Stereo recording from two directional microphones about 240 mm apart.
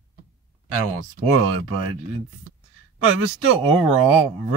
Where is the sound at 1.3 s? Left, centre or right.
Right.